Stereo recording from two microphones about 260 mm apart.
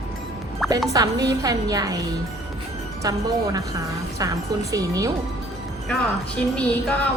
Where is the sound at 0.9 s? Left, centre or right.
Centre.